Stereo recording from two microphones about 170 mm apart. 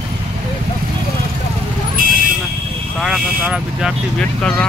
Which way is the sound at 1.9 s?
55° right (ahead or behind).